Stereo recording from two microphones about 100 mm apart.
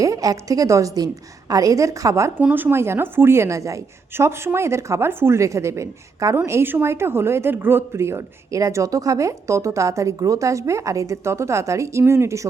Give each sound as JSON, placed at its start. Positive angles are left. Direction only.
{"t": 0.0, "sound": "a woman's voice", "side_deg": -35}
{"t": 2.4, "sound": "speech", "side_deg": -15}